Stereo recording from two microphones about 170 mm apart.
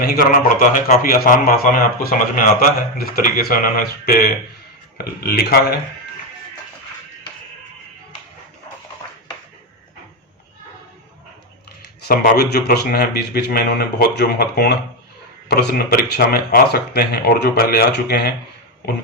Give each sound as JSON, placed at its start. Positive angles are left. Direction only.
{"t": 0.0, "sound": "a man's voice", "side_deg": 60}
{"t": 12.0, "sound": "speech", "side_deg": 60}